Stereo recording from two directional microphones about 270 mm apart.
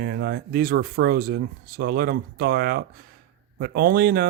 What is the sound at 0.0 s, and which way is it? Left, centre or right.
Speech, right.